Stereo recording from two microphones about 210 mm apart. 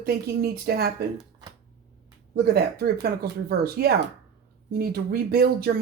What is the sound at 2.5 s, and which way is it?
Speech, 50° right (ahead or behind).